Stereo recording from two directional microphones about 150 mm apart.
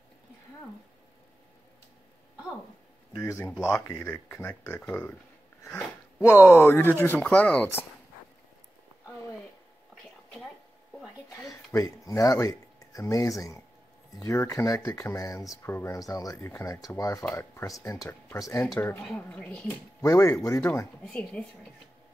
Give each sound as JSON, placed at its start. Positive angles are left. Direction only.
{"t": 3.2, "sound": "speech", "side_deg": 20}
{"t": 3.4, "sound": "speech", "side_deg": 5}
{"t": 3.7, "sound": "speech", "side_deg": 15}
{"t": 11.5, "sound": "speech", "side_deg": 20}
{"t": 19.0, "sound": "speech", "side_deg": 5}
{"t": 20.0, "sound": "speech", "side_deg": 20}
{"t": 21.0, "sound": "speech", "side_deg": 5}